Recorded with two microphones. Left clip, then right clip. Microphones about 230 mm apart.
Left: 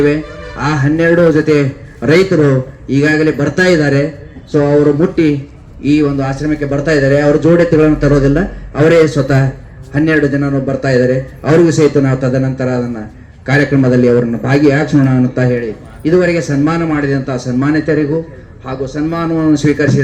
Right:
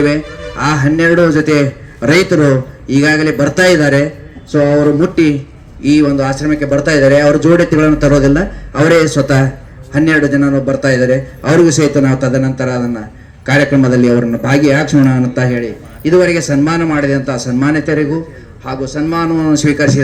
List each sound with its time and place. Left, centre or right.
0.0 s a man's voice: right